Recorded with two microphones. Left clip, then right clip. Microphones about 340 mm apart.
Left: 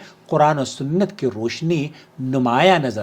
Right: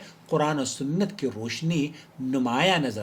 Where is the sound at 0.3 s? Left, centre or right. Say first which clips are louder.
Left 9 dB; left.